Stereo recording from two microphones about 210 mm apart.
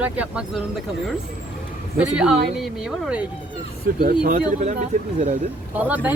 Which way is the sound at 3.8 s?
45° right (ahead or behind).